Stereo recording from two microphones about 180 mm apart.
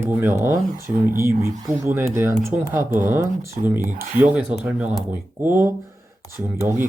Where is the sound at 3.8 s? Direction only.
45° right (ahead or behind).